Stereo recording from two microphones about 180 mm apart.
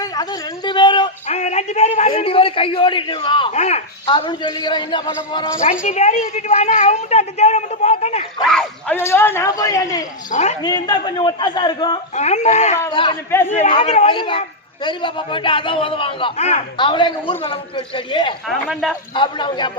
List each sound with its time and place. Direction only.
0.0 s a sound: 25° left (ahead or behind)
1.3 s a man's voice: 40° left (ahead or behind)
3.5 s a woman's voice: 40° left (ahead or behind)
4.1 s a man's voice: 25° left (ahead or behind)
5.8 s a woman's voice: 40° left (ahead or behind)
8.4 s a man's voice: 5° left (ahead or behind); by 10.0 s 20° left (ahead or behind)
10.3 s a woman's voice: 40° left (ahead or behind)
10.6 s a man's voice: 20° left (ahead or behind)
12.1 s a woman's voice: 40° left (ahead or behind)
12.9 s a man's voice: 30° left (ahead or behind)
18.4 s speech: centre (ahead or behind)
19.1 s a man's voice: 25° left (ahead or behind)